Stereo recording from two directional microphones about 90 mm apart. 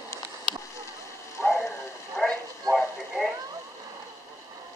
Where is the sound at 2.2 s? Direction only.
Centre (ahead or behind).